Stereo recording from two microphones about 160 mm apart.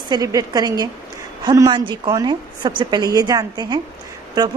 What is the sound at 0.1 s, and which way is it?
A woman's voice, 25° right (ahead or behind).